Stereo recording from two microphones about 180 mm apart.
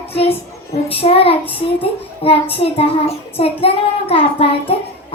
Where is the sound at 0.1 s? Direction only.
35° left (ahead or behind).